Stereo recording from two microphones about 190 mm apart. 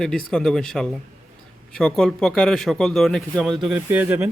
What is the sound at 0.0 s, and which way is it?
A man's voice, 5° left (ahead or behind).